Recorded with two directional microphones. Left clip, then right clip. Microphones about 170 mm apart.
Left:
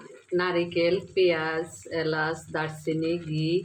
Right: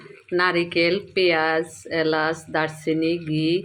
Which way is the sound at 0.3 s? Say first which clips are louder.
Right 5 dB; 40° right (ahead or behind).